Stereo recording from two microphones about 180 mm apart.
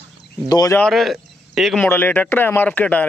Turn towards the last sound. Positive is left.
turn(degrees=10)  # may be behind; listen again after turning